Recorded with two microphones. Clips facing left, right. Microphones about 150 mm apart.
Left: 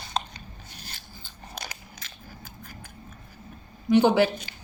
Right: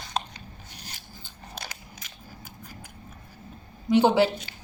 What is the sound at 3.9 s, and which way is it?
Speech, 25° right (ahead or behind).